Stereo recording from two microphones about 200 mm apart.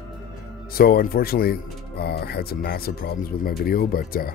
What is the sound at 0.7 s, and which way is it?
Speech, 50° left (ahead or behind).